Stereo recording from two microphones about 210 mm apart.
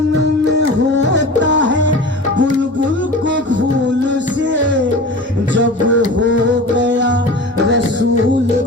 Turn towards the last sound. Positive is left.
turn(degrees=-60)  # may be behind; listen again after turning